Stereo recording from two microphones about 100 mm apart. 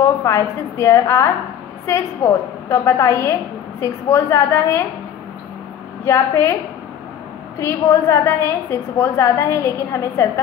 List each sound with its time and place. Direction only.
0.2 s a woman's voice: 30° left (ahead or behind)
6.0 s a woman's voice: 30° left (ahead or behind)
7.5 s a woman's voice: 30° left (ahead or behind)